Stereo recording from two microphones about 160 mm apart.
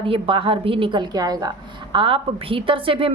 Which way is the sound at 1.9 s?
35° right (ahead or behind).